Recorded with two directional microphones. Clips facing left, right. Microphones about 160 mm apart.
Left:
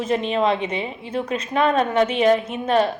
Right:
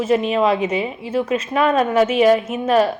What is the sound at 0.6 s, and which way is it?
Speech, 30° left (ahead or behind).